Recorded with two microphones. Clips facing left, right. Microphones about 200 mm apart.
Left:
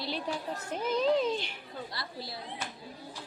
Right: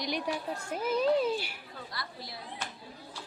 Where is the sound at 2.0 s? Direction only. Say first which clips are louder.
Even; 25° left (ahead or behind).